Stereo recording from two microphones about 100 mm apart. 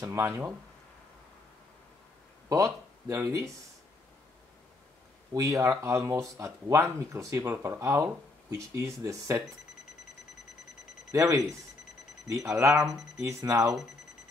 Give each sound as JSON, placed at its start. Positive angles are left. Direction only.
{"t": 0.0, "sound": "speech", "side_deg": -35}
{"t": 2.5, "sound": "speech", "side_deg": -30}
{"t": 5.3, "sound": "speech", "side_deg": -35}
{"t": 11.1, "sound": "speech", "side_deg": -35}